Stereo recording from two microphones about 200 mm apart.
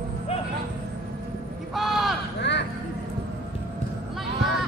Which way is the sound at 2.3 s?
60° left (ahead or behind).